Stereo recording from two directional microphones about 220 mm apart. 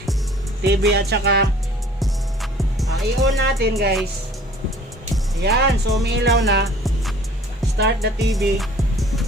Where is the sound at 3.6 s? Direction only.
45° right (ahead or behind).